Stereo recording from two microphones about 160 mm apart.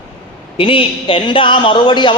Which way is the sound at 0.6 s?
35° left (ahead or behind).